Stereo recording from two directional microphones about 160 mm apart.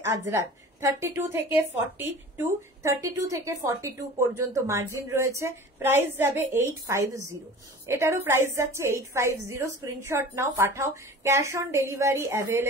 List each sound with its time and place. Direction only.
0.0 s a woman's voice: 15° right (ahead or behind)